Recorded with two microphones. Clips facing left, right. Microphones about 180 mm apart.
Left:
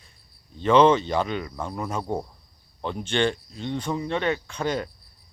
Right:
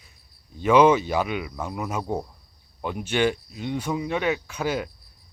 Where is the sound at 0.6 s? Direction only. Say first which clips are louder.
Even; 10° right (ahead or behind).